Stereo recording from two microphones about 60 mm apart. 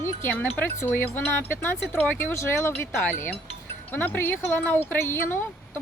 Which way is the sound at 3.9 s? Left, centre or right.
Left.